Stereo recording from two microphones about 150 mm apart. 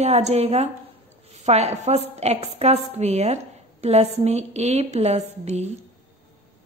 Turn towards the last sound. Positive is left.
turn(degrees=-45)  # may be behind; listen again after turning